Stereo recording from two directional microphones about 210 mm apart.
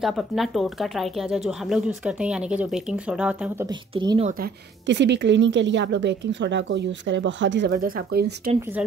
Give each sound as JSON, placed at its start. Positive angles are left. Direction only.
{"t": 0.0, "sound": "speech", "side_deg": 0}
{"t": 3.9, "sound": "speech", "side_deg": -25}
{"t": 4.8, "sound": "a woman's voice", "side_deg": -55}
{"t": 7.7, "sound": "speech", "side_deg": -40}